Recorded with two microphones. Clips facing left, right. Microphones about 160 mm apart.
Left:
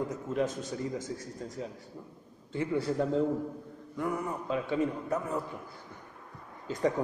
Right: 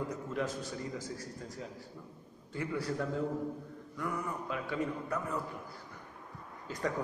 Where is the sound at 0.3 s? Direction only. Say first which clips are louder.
Left 7 dB; 20° left (ahead or behind).